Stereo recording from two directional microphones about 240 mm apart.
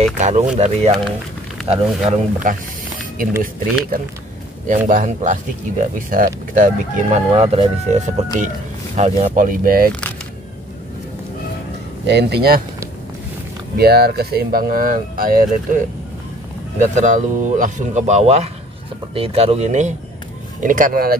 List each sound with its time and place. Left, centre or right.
0.2 s speech: right
4.6 s speech: right
12.1 s speech: right
13.7 s speech: right
16.9 s speech: right